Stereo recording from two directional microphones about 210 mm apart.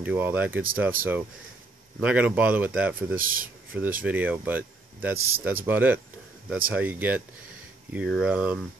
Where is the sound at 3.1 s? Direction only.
40° right (ahead or behind).